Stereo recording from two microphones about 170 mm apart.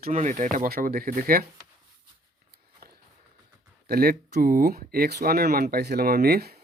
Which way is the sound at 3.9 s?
65° right (ahead or behind).